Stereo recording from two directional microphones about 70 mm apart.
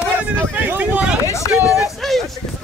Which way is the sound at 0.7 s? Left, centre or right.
Right.